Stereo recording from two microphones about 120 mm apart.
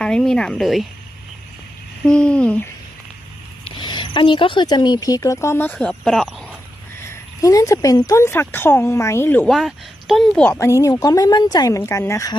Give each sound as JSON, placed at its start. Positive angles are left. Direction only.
{"t": 0.0, "sound": "speech", "side_deg": 5}
{"t": 2.0, "sound": "speech", "side_deg": 10}
{"t": 3.6, "sound": "speech", "side_deg": 40}
{"t": 5.7, "sound": "speech", "side_deg": 5}
{"t": 7.1, "sound": "speech", "side_deg": 30}
{"t": 9.5, "sound": "speech", "side_deg": 0}
{"t": 10.4, "sound": "speech", "side_deg": 15}
{"t": 10.7, "sound": "a woman's voice", "side_deg": 25}
{"t": 11.8, "sound": "speech", "side_deg": 20}